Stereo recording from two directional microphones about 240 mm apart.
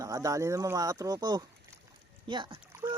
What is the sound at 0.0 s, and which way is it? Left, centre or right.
Speech, centre.